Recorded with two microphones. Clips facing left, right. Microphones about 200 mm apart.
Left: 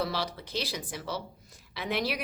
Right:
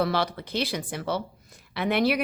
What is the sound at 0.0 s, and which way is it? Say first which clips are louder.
A woman's voice: right 6 dB; 60° right (ahead or behind).